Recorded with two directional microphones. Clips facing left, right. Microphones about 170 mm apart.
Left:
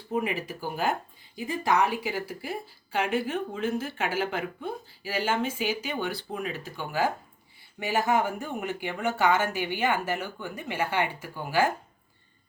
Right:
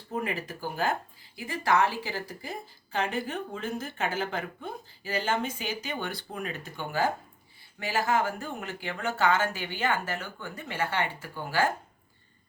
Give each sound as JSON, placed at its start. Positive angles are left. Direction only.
{"t": 0.1, "sound": "a woman's voice", "side_deg": 10}